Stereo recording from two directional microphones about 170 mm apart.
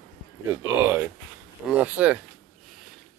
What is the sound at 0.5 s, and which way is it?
Speech, 15° right (ahead or behind).